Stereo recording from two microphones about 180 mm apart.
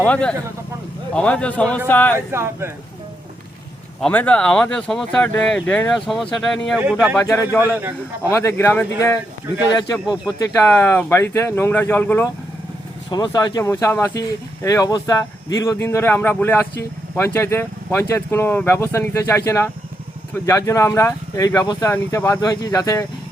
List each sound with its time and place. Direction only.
0.0 s speech: 5° left (ahead or behind)
2.1 s a man's voice: 15° right (ahead or behind)
4.0 s a man's voice: 10° left (ahead or behind); by 8.3 s 10° right (ahead or behind)
8.3 s speech: 15° left (ahead or behind)
10.3 s speech: 15° left (ahead or behind)
13.1 s speech: 20° left (ahead or behind)